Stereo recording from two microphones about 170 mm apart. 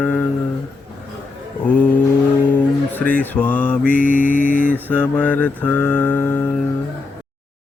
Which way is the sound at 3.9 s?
55° right (ahead or behind).